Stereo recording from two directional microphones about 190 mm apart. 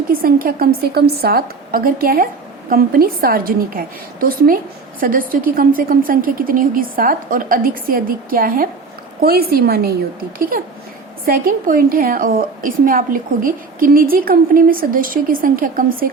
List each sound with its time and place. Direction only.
0.1 s a woman's voice: 50° right (ahead or behind)